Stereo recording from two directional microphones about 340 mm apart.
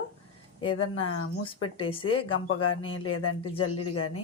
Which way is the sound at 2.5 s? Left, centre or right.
Left.